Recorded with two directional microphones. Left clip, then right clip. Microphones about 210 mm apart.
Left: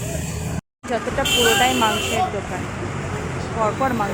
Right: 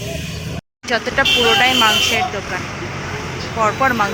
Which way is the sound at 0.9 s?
Centre (ahead or behind).